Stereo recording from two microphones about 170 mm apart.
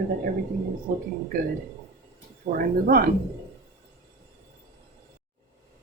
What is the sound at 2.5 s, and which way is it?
Speech, 60° right (ahead or behind).